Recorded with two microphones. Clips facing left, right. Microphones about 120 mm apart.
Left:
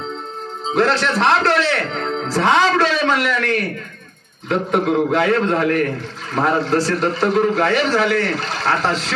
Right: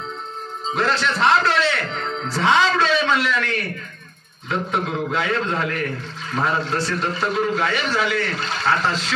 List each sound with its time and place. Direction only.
0.7 s a man's voice: 65° left (ahead or behind)